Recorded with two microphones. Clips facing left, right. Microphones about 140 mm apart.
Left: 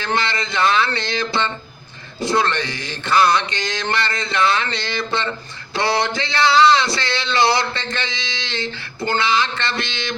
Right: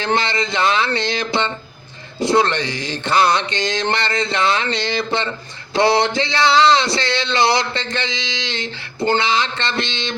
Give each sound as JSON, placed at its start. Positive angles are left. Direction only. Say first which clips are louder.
{"t": 0.0, "sound": "speech", "louder": "right 3 dB", "side_deg": -20}